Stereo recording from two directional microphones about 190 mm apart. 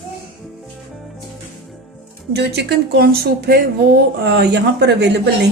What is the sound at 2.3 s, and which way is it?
A woman's voice, 60° right (ahead or behind).